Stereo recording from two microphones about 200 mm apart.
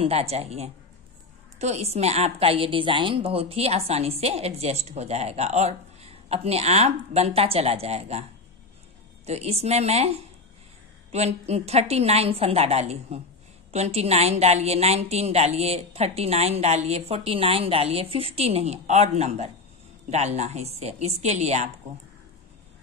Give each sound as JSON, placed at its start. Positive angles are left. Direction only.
{"t": 0.0, "sound": "a woman's voice", "side_deg": -30}